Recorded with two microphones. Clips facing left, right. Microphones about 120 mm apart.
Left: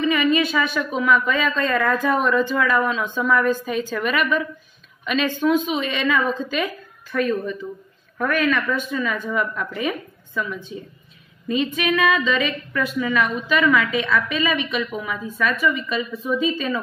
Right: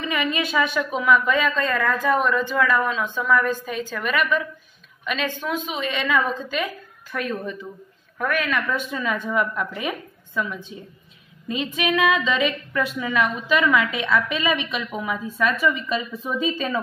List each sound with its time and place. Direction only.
0.0 s a woman's voice: 10° right (ahead or behind)
7.2 s a woman's voice: 15° right (ahead or behind); by 16.8 s 35° right (ahead or behind)